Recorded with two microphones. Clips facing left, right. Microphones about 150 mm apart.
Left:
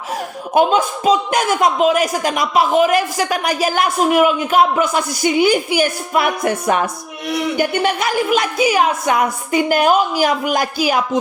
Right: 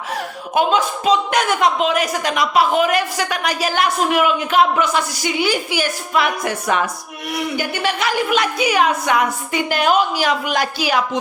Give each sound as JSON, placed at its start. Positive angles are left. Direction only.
{"t": 0.5, "sound": "a woman's voice", "side_deg": 45}
{"t": 7.5, "sound": "speech", "side_deg": 55}
{"t": 8.3, "sound": "a woman's voice", "side_deg": 40}